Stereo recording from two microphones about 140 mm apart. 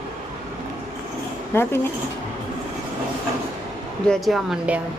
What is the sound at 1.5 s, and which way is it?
Speech, 15° left (ahead or behind).